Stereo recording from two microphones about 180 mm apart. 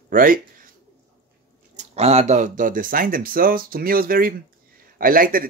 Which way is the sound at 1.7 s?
35° right (ahead or behind).